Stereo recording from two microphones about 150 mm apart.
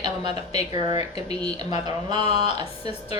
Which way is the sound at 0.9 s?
25° right (ahead or behind).